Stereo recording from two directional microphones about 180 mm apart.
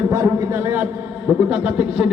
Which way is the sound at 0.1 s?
15° right (ahead or behind).